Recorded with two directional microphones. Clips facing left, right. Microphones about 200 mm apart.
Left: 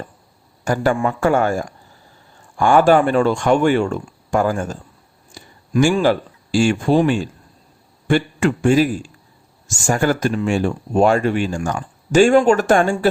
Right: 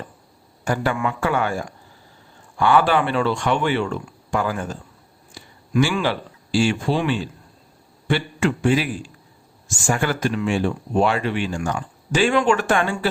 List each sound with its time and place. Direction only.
0.6 s a man's voice: 40° left (ahead or behind)